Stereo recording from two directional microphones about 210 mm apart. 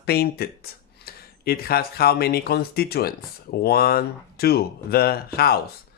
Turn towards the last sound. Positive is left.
turn(degrees=45)  # may be behind; listen again after turning